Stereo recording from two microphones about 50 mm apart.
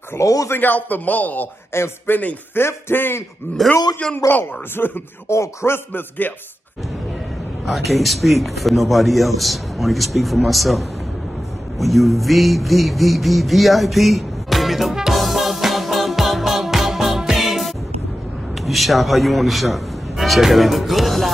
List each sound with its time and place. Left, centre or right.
0.5 s a man's voice: left
1.7 s speech: left
3.6 s a man's voice: centre
4.3 s speech: left
5.3 s speech: left
5.9 s a man's voice: left
7.6 s a man's voice: centre
11.8 s a sound: centre
17.2 s music: centre
18.5 s a man's voice: centre